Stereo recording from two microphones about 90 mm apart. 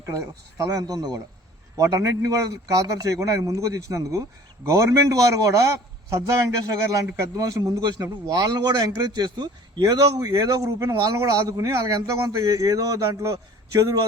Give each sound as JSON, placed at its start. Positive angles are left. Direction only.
{"t": 0.0, "sound": "a man's voice", "side_deg": -40}